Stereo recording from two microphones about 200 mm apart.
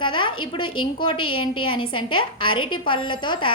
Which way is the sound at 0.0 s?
25° left (ahead or behind).